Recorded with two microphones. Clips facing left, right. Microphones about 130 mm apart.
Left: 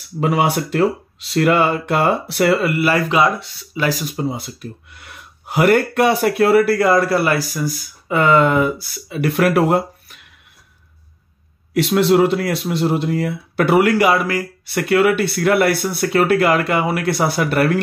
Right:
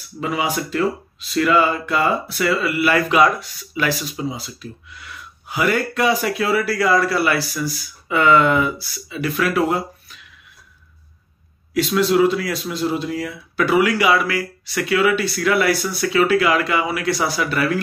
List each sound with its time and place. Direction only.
0.2 s speech: 70° left (ahead or behind)
2.8 s speech: 30° left (ahead or behind)
4.0 s speech: 55° left (ahead or behind)
11.7 s speech: 65° left (ahead or behind)